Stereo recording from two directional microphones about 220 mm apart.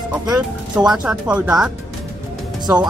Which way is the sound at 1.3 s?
15° right (ahead or behind).